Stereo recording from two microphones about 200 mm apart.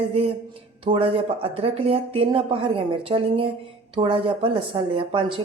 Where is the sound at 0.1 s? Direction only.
30° right (ahead or behind).